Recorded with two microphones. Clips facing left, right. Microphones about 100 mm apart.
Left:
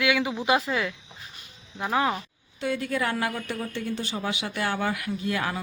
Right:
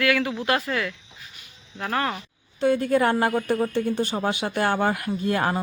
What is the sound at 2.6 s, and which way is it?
Speech, 40° right (ahead or behind).